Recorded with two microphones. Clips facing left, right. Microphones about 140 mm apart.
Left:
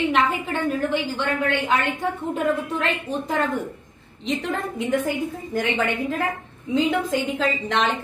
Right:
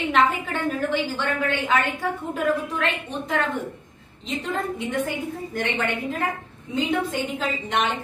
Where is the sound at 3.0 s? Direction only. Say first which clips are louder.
Left 2 dB; 35° left (ahead or behind).